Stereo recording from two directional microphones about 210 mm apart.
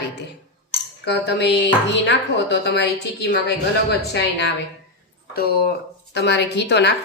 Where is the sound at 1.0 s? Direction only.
50° left (ahead or behind).